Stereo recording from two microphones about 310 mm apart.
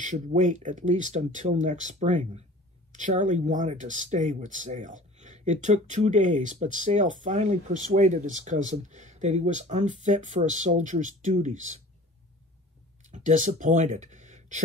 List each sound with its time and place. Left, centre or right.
0.0 s speech: right
13.0 s speech: right